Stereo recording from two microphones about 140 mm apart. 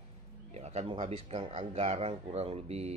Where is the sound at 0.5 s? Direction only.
50° right (ahead or behind).